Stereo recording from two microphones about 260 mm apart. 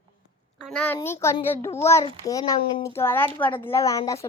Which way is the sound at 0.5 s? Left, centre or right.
Centre.